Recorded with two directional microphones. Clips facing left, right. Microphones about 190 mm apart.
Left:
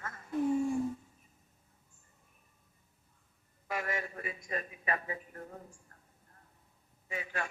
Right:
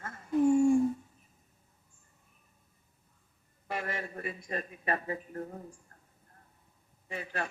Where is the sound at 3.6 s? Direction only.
30° right (ahead or behind).